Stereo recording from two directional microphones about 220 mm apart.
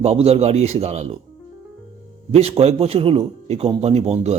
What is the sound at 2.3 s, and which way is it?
A man's voice, 25° right (ahead or behind).